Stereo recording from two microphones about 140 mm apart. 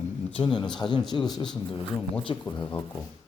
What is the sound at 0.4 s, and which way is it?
Speech, 35° left (ahead or behind).